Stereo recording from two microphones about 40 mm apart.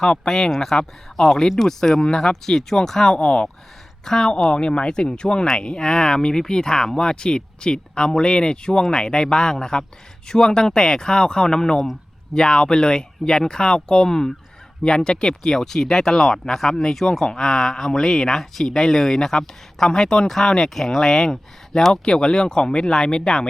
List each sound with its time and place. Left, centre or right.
0.0 s speech: centre
3.2 s speech: left
4.0 s a woman's voice: centre
4.3 s speech: left
22.0 s speech: left